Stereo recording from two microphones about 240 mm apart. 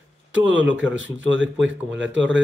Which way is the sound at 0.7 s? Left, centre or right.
Right.